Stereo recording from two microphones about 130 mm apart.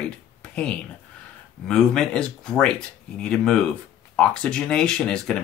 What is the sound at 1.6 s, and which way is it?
Speech, 5° left (ahead or behind).